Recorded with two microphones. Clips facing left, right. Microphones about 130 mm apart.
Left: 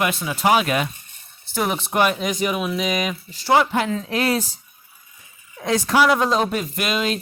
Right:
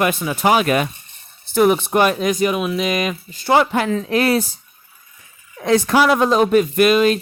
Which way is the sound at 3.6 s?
65° right (ahead or behind).